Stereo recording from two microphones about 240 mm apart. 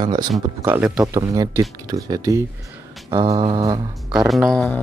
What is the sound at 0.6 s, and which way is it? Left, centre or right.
Speech, centre.